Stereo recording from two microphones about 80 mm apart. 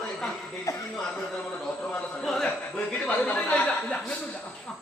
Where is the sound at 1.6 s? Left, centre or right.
Centre.